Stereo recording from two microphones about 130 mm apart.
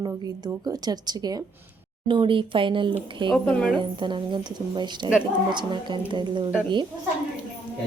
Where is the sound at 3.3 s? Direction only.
5° left (ahead or behind).